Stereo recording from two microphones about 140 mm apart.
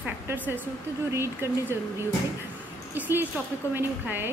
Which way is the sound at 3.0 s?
15° right (ahead or behind).